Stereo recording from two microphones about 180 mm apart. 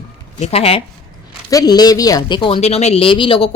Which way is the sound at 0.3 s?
35° left (ahead or behind).